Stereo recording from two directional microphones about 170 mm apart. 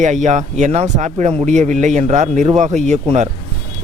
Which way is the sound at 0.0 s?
45° right (ahead or behind).